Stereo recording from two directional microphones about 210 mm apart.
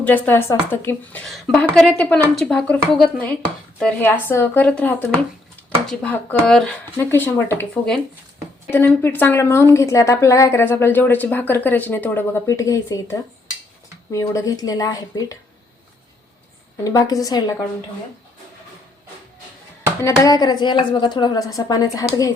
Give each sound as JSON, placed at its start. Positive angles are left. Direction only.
{"t": 0.0, "sound": "a woman's voice", "side_deg": 10}
{"t": 14.1, "sound": "a woman's voice", "side_deg": 15}
{"t": 16.8, "sound": "a woman's voice", "side_deg": 15}
{"t": 20.1, "sound": "a woman's voice", "side_deg": 15}